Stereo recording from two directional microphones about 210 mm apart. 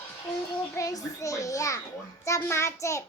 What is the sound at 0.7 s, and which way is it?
A child's voice, 15° left (ahead or behind).